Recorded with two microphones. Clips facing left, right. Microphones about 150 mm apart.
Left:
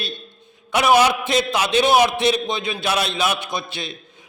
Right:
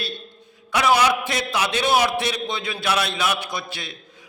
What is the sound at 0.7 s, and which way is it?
A man's voice, 20° left (ahead or behind).